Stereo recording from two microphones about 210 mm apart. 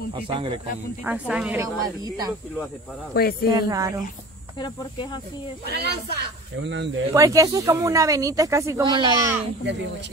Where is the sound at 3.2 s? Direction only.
45° left (ahead or behind).